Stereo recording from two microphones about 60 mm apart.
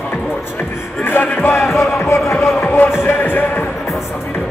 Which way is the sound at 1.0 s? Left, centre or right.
Left.